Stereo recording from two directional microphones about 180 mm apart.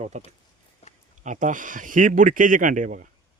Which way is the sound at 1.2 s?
45° right (ahead or behind).